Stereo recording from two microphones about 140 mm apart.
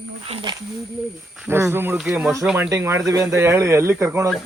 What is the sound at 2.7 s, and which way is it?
Speech, 20° right (ahead or behind).